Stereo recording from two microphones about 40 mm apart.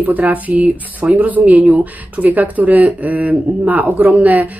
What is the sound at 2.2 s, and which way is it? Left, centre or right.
Speech, right.